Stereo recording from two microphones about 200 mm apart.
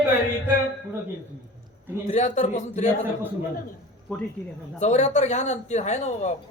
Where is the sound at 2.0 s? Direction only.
35° left (ahead or behind).